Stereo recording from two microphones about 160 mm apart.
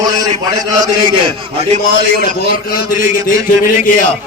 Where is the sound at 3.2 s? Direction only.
55° left (ahead or behind).